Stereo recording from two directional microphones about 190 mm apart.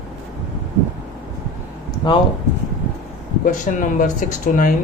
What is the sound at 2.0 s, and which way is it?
Speech, 25° left (ahead or behind).